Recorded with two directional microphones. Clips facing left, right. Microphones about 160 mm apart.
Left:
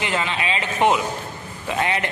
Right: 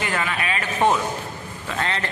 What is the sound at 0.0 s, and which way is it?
A man's voice, 20° left (ahead or behind).